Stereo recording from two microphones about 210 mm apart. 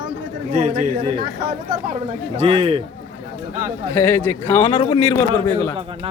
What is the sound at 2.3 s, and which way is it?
Speech, 30° right (ahead or behind).